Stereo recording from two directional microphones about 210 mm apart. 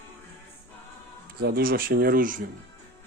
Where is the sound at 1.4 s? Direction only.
45° right (ahead or behind).